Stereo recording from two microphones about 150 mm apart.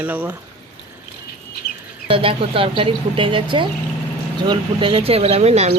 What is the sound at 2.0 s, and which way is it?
Speech, 40° right (ahead or behind).